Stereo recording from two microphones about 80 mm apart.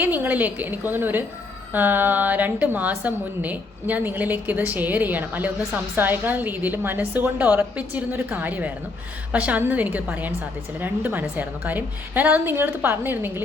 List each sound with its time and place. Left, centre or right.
0.0 s a woman's voice: right